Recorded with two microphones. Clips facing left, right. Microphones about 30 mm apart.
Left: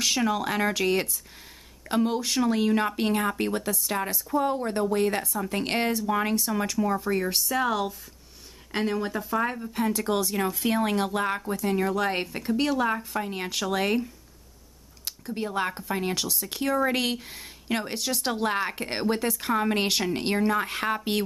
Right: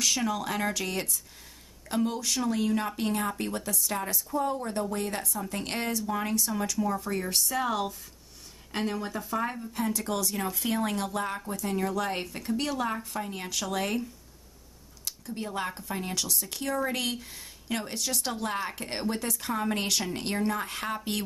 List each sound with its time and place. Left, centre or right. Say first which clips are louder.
0.0 s a woman's voice: left 3 dB; left
7.0 s speech: left 4 dB; centre
15.0 s speech: left 4 dB; left